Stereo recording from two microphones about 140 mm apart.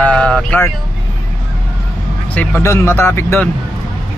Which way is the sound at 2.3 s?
15° left (ahead or behind).